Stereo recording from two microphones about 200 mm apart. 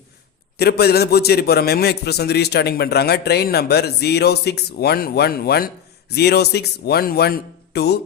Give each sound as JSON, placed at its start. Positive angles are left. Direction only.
{"t": 0.6, "sound": "a man's voice", "side_deg": 50}